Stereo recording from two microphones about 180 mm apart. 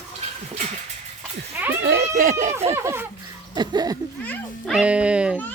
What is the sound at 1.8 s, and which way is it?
Speech, 65° right (ahead or behind).